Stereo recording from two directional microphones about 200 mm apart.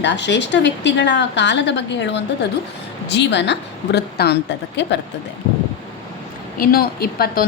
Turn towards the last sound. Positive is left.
turn(degrees=50)  # may be behind; listen again after turning